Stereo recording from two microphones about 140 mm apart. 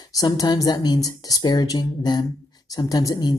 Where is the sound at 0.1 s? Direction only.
25° left (ahead or behind).